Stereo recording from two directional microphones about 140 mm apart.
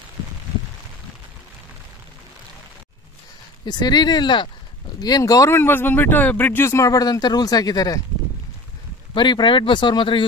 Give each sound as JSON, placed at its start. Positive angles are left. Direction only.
{"t": 3.6, "sound": "speech", "side_deg": 30}
{"t": 9.1, "sound": "speech", "side_deg": 35}